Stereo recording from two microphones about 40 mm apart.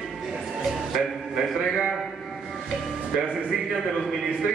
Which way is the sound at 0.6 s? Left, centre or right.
Centre.